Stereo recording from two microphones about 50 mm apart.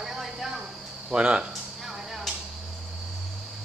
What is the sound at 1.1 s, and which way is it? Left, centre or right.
Speech, right.